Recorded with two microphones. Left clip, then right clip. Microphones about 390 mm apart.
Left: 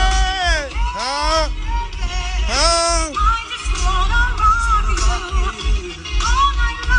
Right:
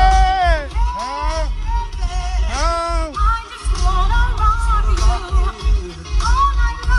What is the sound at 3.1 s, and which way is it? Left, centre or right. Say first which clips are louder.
Music: left 2 dB; centre.